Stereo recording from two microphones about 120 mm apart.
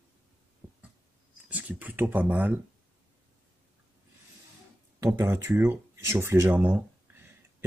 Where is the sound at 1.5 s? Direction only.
10° right (ahead or behind).